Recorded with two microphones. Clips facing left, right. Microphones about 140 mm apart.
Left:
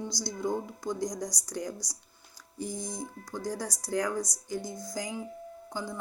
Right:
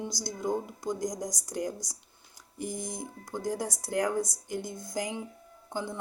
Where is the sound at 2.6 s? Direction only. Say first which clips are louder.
Even; 55° right (ahead or behind).